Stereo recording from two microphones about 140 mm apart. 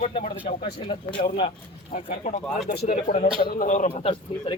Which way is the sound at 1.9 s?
65° left (ahead or behind).